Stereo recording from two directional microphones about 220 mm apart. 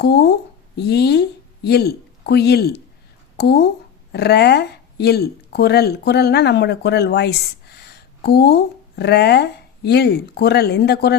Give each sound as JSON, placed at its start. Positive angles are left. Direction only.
{"t": 0.0, "sound": "a woman's voice", "side_deg": 45}